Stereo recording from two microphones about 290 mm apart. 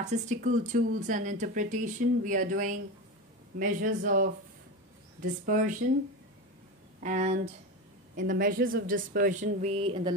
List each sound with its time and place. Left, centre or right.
0.0 s speech: right
7.0 s speech: right